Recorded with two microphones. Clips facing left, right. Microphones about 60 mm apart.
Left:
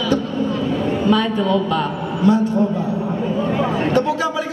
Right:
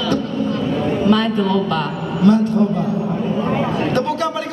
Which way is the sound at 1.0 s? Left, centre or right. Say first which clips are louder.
Right 1 dB; centre.